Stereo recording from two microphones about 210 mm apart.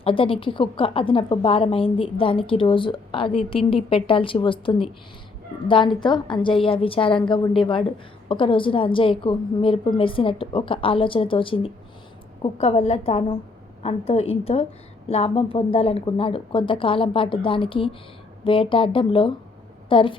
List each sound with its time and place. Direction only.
0.0 s a woman's voice: 25° left (ahead or behind)